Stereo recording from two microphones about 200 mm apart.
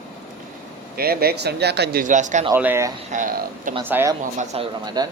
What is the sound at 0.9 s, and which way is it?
Speech, 50° right (ahead or behind).